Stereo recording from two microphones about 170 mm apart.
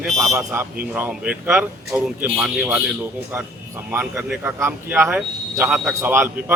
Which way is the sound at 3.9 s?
10° right (ahead or behind).